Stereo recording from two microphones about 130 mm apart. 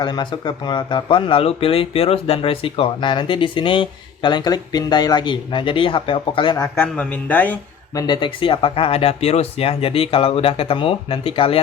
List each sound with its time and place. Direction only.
0.0 s speech: 35° left (ahead or behind)
6.7 s speech: 10° left (ahead or behind)
7.9 s speech: 35° left (ahead or behind)